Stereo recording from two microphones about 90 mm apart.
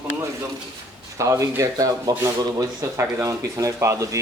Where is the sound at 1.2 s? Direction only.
35° right (ahead or behind).